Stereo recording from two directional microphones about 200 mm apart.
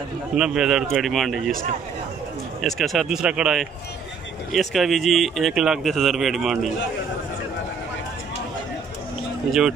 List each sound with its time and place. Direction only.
0.4 s speech: 5° right (ahead or behind)
2.6 s speech: centre (ahead or behind)